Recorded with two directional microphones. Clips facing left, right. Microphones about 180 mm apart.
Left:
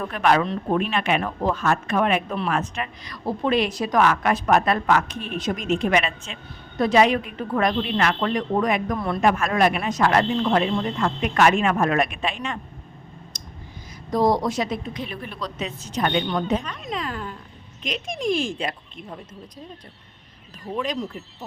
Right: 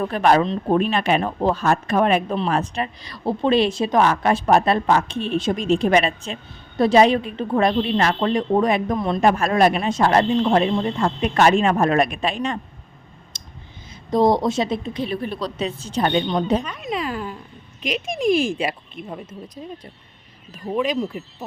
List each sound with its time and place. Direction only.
0.0 s speech: 35° right (ahead or behind)
9.2 s speech: 35° right (ahead or behind)
13.3 s clicking: 25° right (ahead or behind)
14.1 s speech: 25° right (ahead or behind)
16.6 s speech: 5° right (ahead or behind)
20.7 s speech: 10° right (ahead or behind)